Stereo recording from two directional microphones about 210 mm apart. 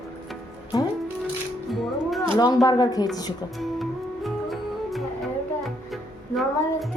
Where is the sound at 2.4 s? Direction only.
20° left (ahead or behind).